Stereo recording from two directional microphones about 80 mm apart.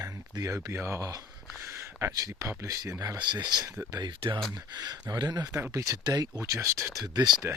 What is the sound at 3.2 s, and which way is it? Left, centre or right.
Speech, right.